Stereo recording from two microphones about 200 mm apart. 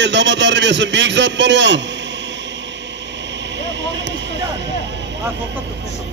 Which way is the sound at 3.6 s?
60° right (ahead or behind).